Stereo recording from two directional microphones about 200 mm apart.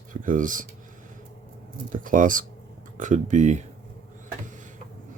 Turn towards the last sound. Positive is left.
turn(degrees=-35)  # may be behind; listen again after turning